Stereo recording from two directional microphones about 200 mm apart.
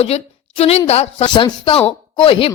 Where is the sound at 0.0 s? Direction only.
30° left (ahead or behind).